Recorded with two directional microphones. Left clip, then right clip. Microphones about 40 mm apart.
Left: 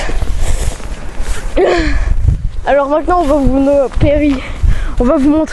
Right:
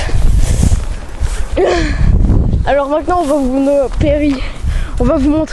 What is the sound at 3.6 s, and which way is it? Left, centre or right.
Speech, right.